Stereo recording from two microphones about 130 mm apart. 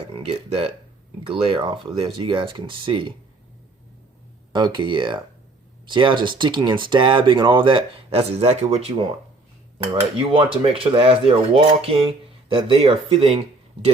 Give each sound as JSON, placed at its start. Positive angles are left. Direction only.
{"t": 0.1, "sound": "speech", "side_deg": -50}
{"t": 4.5, "sound": "speech", "side_deg": -35}
{"t": 9.7, "sound": "cutlery", "side_deg": -40}